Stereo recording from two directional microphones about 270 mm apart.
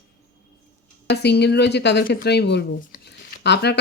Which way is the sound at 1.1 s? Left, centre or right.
Left.